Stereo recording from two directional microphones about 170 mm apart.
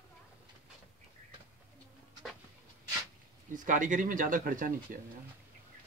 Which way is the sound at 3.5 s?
50° right (ahead or behind).